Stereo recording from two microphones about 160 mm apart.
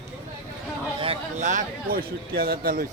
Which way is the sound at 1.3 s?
50° right (ahead or behind).